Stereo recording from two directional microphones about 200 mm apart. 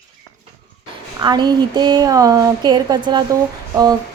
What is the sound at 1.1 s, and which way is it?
A woman's voice, 20° right (ahead or behind).